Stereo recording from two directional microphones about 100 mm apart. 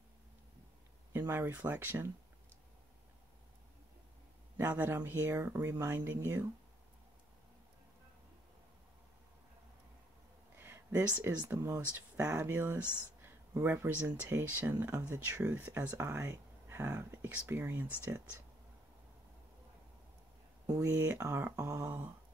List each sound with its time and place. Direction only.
1.1 s speech: 20° right (ahead or behind)
4.6 s speech: 20° right (ahead or behind)
10.6 s speech: 20° right (ahead or behind)
12.3 s speech: 15° right (ahead or behind)
16.0 s speech: 25° right (ahead or behind)
20.6 s speech: 35° right (ahead or behind)
20.9 s speech: 20° right (ahead or behind)